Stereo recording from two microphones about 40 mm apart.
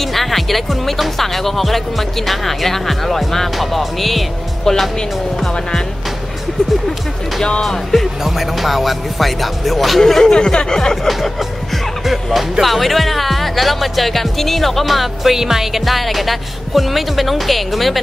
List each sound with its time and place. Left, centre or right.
0.0 s speech: centre
8.2 s speech: centre
10.3 s speech: left
11.1 s speech: centre